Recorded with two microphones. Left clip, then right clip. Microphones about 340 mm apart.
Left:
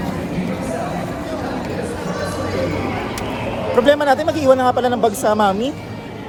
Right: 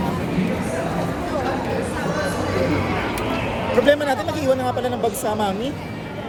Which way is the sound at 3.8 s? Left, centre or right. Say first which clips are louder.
Left 4 dB; centre.